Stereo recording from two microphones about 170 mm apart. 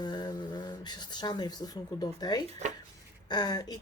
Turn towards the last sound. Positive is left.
turn(degrees=25)  # may be behind; listen again after turning